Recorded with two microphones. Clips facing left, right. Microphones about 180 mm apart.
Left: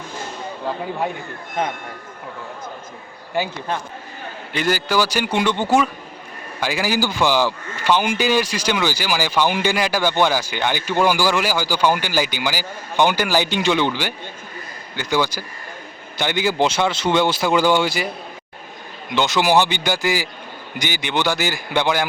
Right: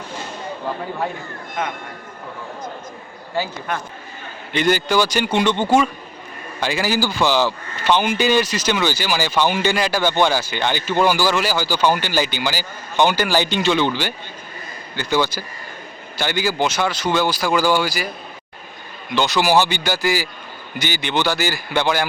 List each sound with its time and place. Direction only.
3.3 s a man's voice: 15° left (ahead or behind)
4.5 s a man's voice: 5° left (ahead or behind); by 18.1 s 25° left (ahead or behind)
19.1 s a man's voice: 20° left (ahead or behind)